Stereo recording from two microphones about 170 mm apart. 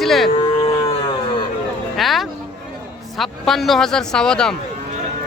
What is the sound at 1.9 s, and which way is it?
Speech, centre (ahead or behind).